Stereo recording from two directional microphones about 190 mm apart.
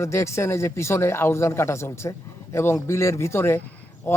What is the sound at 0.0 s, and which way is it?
A man's voice, 15° left (ahead or behind).